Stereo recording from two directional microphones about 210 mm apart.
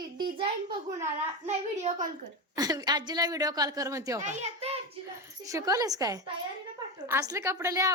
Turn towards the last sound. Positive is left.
turn(degrees=-15)  # may be behind; listen again after turning